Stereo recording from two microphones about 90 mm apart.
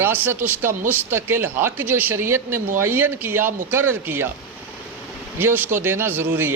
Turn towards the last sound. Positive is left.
turn(degrees=-25)  # may be behind; listen again after turning